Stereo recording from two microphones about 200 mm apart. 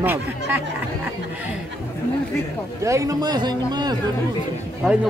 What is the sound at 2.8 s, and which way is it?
A man's voice, 15° right (ahead or behind).